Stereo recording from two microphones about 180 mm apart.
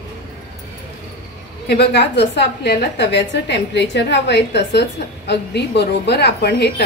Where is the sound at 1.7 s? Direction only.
65° left (ahead or behind).